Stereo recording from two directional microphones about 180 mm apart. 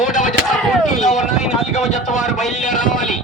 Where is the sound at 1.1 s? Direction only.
Centre (ahead or behind).